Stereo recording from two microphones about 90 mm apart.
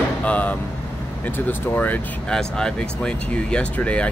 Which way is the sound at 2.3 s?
10° left (ahead or behind).